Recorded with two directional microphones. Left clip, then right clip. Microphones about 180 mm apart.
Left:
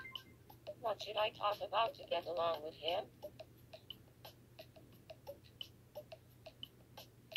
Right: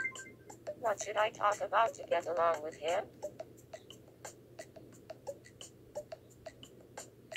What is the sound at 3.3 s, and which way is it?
Music, 35° right (ahead or behind).